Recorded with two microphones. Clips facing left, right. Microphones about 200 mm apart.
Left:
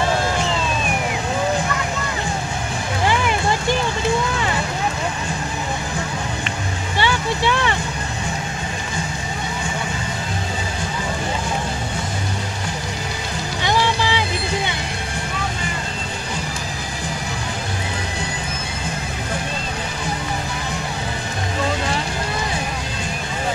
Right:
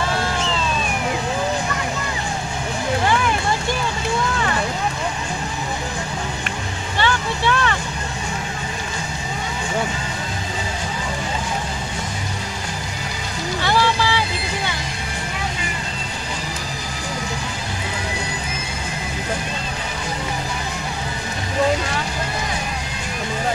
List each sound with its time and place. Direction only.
7.0 s vehicle: 15° left (ahead or behind)
13.6 s music: 15° left (ahead or behind)